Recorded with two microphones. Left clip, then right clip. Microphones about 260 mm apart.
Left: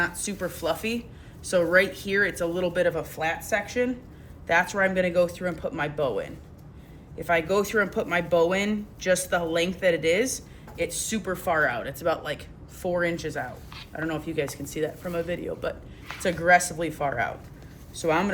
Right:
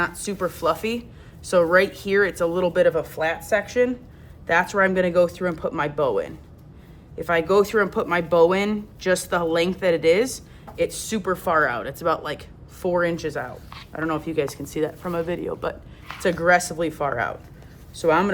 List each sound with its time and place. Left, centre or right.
0.0 s speech: centre